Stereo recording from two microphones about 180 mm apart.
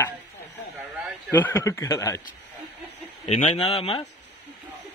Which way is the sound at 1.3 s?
15° left (ahead or behind).